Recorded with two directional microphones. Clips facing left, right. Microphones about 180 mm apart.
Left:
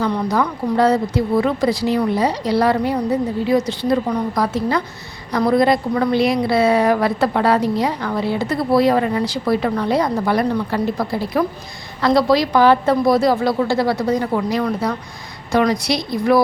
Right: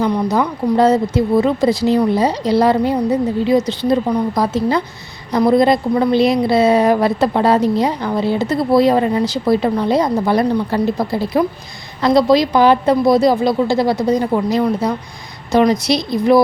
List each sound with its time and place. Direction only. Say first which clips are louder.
0.0 s a woman's voice: right 3 dB; 15° right (ahead or behind)